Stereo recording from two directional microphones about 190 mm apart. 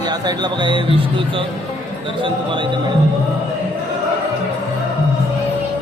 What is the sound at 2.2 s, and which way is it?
Speech, 25° right (ahead or behind).